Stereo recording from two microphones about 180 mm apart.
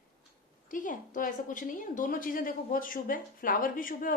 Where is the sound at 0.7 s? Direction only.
50° left (ahead or behind).